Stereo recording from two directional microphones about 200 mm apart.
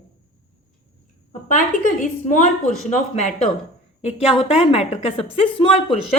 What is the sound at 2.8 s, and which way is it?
A woman's voice, 35° left (ahead or behind).